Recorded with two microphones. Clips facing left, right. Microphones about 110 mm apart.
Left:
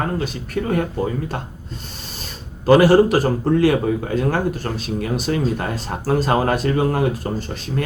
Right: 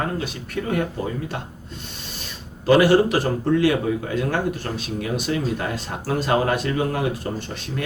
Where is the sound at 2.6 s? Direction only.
40° left (ahead or behind).